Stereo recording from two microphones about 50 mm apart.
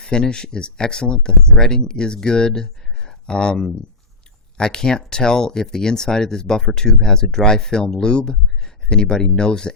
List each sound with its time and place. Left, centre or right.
0.0 s speech: centre